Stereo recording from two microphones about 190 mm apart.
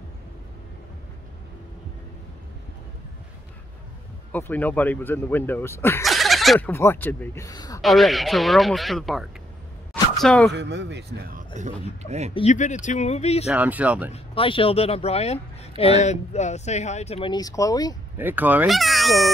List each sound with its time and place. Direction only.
4.3 s speech: 10° left (ahead or behind)
6.0 s a sound: centre (ahead or behind)
6.7 s speech: 10° left (ahead or behind)
7.8 s speech: centre (ahead or behind)
10.5 s a man's voice: 65° right (ahead or behind)
11.3 s speech: 40° right (ahead or behind)
12.4 s speech: 40° left (ahead or behind)
13.5 s speech: 5° right (ahead or behind)
14.1 s speech: 30° left (ahead or behind)
18.1 s speech: 10° right (ahead or behind)